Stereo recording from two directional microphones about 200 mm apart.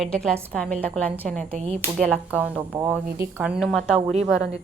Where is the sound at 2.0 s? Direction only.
Centre (ahead or behind).